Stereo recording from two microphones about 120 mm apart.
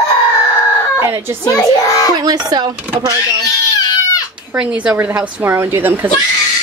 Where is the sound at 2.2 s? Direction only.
35° right (ahead or behind).